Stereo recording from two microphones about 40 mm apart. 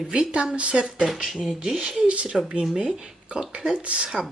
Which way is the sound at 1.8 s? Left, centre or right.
Right.